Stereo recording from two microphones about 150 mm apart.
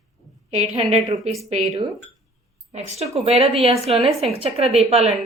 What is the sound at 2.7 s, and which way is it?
A woman's voice, 45° right (ahead or behind).